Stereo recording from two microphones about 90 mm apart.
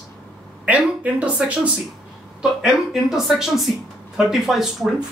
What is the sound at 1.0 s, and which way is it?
Speech, 15° right (ahead or behind).